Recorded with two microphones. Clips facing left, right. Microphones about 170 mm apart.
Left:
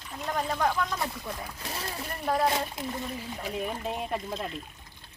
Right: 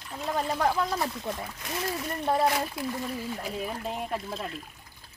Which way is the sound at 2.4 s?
25° left (ahead or behind).